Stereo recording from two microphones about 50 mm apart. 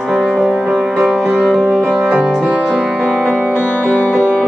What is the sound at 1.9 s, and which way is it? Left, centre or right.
Music, centre.